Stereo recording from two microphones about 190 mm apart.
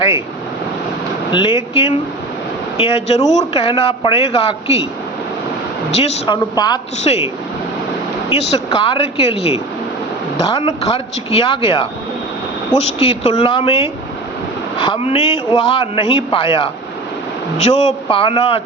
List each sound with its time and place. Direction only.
1.3 s a man's voice: 25° left (ahead or behind)
6.0 s speech: 35° left (ahead or behind)
6.3 s a man's voice: 20° left (ahead or behind)
7.0 s speech: 35° left (ahead or behind)
8.3 s speech: 35° left (ahead or behind)
13.0 s a man's voice: 30° left (ahead or behind)